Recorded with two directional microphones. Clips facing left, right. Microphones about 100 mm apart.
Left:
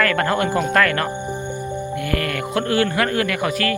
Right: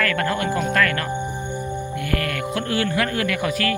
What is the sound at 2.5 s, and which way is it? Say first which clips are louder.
Speech: left 4 dB; 55° left (ahead or behind).